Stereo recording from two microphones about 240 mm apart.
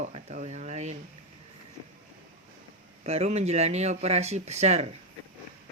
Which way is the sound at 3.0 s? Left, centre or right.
Right.